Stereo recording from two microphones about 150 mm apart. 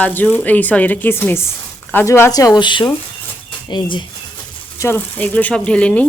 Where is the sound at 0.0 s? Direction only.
10° left (ahead or behind); by 4.0 s 30° left (ahead or behind).